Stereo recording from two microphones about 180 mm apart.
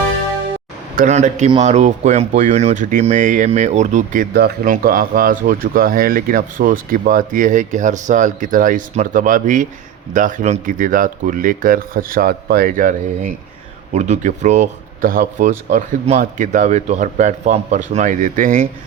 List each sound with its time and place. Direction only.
0.9 s speech: 40° right (ahead or behind)